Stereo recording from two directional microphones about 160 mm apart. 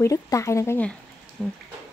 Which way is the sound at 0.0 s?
20° left (ahead or behind).